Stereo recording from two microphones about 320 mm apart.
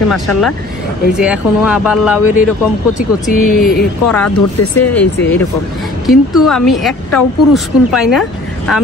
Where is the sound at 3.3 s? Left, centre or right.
Left.